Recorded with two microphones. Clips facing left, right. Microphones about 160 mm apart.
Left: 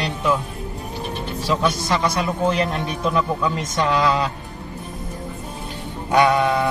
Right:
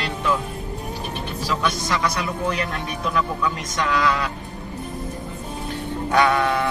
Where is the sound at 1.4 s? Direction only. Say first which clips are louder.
Left 4 dB; 30° left (ahead or behind).